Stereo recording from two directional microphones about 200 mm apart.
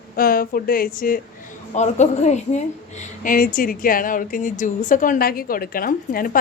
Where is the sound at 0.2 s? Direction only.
45° left (ahead or behind).